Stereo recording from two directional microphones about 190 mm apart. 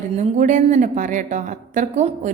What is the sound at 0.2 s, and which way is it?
A woman's voice, 40° right (ahead or behind).